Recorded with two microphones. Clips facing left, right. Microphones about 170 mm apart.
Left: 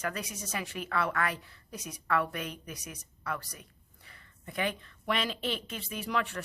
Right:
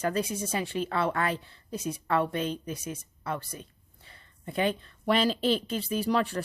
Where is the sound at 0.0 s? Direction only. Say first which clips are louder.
Right 8 dB; 30° right (ahead or behind).